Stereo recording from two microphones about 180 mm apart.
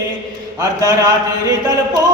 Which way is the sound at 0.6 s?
20° right (ahead or behind).